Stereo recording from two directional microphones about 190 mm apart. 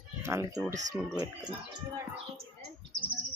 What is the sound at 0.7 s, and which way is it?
Speech, 40° right (ahead or behind).